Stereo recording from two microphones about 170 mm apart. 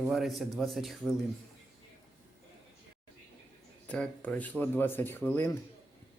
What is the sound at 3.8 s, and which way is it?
Speech, 5° left (ahead or behind).